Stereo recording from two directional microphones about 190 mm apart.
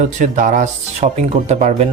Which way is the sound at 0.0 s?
40° right (ahead or behind).